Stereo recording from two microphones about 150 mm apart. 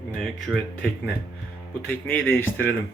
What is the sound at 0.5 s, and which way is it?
A man's voice, 5° left (ahead or behind).